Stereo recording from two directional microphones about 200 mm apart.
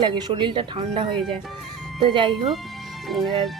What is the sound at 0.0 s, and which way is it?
Speech, 20° right (ahead or behind).